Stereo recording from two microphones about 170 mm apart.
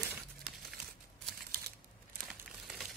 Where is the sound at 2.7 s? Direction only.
Centre (ahead or behind).